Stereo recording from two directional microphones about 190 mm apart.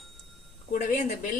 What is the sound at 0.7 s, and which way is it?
Speech, 40° left (ahead or behind).